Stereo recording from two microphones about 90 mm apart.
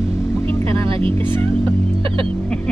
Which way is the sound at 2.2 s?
10° left (ahead or behind).